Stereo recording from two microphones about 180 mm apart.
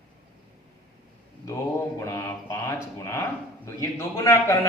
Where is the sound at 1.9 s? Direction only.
15° left (ahead or behind).